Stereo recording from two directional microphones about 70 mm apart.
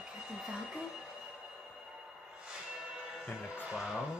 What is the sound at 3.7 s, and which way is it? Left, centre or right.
Speech, centre.